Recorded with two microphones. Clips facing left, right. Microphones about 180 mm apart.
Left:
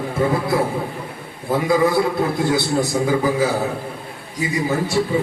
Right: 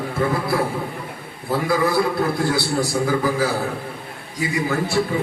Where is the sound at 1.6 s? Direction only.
20° left (ahead or behind).